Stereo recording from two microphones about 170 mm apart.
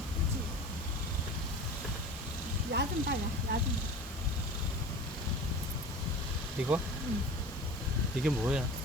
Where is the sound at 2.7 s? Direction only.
75° right (ahead or behind).